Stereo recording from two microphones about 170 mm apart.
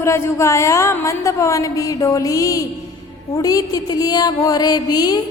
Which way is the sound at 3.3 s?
20° left (ahead or behind).